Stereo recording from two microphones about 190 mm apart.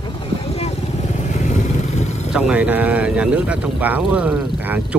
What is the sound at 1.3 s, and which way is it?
Vehicle, 40° left (ahead or behind).